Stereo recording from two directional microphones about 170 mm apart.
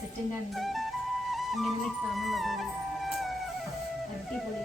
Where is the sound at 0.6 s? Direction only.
Centre (ahead or behind).